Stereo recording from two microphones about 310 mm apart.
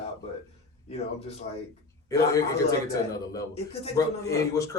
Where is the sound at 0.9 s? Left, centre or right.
Centre.